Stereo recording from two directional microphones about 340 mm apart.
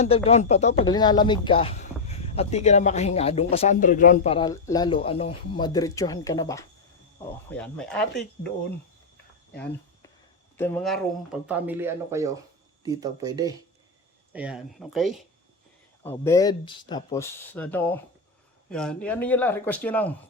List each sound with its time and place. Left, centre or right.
0.0 s speech: centre
10.6 s speech: centre